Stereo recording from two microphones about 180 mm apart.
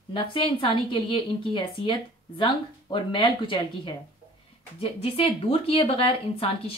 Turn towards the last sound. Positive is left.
turn(degrees=30)  # may be behind; listen again after turning